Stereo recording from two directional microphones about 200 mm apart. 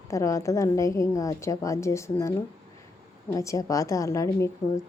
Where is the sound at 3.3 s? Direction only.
15° left (ahead or behind).